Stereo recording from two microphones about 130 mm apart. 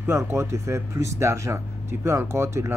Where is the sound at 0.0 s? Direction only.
20° right (ahead or behind).